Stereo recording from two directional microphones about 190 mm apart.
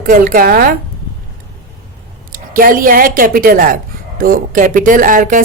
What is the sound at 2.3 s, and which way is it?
A woman's voice, 50° right (ahead or behind).